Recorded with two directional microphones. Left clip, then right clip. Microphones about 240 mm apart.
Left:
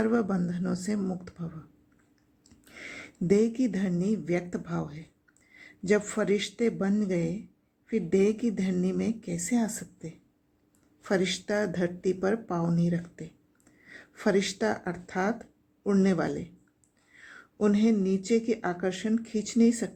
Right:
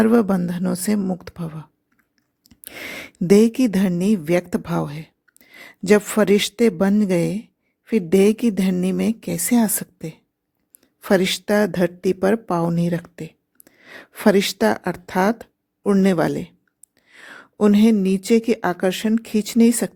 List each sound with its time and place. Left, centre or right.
0.0 s a woman's voice: right